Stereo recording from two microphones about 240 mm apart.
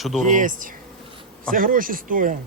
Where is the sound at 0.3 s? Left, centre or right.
Right.